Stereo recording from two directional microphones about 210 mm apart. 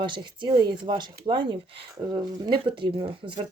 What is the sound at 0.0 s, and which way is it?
Speech, 20° right (ahead or behind).